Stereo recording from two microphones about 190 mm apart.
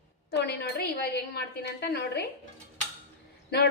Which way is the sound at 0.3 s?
60° left (ahead or behind).